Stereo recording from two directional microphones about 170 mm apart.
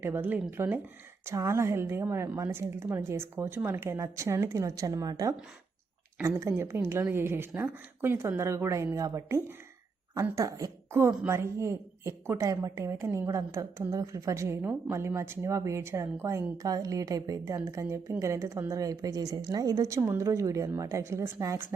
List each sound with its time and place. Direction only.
0.0 s a woman's voice: 10° right (ahead or behind)